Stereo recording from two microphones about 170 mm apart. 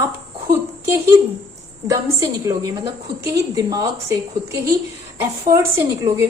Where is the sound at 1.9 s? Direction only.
20° right (ahead or behind).